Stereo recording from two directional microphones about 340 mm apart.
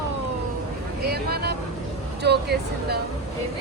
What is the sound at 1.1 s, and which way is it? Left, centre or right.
Vehicle, right.